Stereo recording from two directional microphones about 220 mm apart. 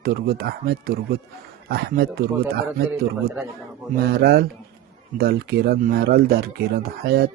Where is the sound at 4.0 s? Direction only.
45° right (ahead or behind).